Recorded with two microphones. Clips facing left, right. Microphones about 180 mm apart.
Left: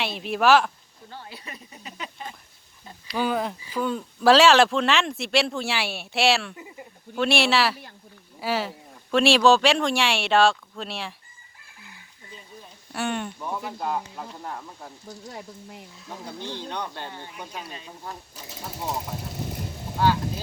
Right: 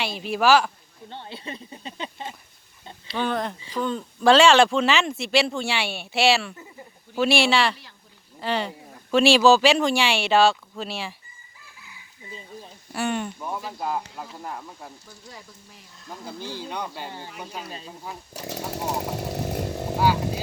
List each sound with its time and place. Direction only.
0.0 s a man's voice: centre (ahead or behind)
1.1 s speech: 25° right (ahead or behind)
3.2 s a man's voice: 5° left (ahead or behind)
12.9 s a man's voice: centre (ahead or behind)
15.3 s speech: 55° left (ahead or behind)
16.0 s speech: 5° right (ahead or behind)
18.3 s speech: 70° right (ahead or behind)
19.3 s chainsaw: 70° right (ahead or behind)